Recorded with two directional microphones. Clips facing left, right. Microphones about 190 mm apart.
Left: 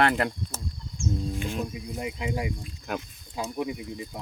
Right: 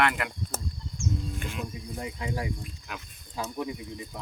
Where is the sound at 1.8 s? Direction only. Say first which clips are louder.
Left 3 dB; 15° left (ahead or behind).